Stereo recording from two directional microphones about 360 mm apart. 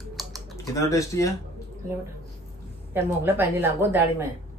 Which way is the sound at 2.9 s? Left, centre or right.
Centre.